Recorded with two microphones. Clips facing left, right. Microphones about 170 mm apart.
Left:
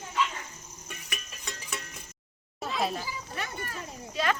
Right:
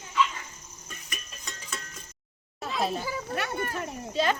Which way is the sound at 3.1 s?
65° right (ahead or behind).